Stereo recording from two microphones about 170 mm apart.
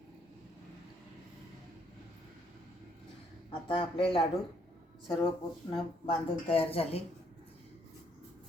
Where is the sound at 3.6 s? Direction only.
30° left (ahead or behind).